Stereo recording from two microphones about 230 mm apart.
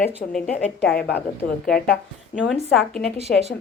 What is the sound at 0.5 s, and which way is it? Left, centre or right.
Speech, centre.